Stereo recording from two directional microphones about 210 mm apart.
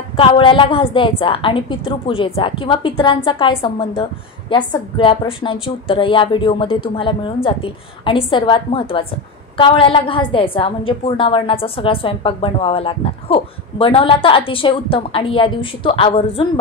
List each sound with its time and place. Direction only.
0.1 s a woman's voice: 25° left (ahead or behind)